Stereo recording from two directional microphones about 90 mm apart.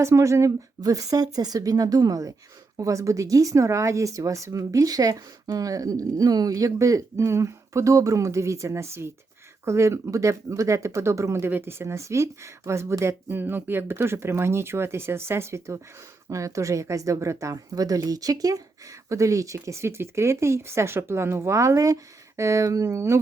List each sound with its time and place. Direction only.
0.0 s speech: 35° right (ahead or behind)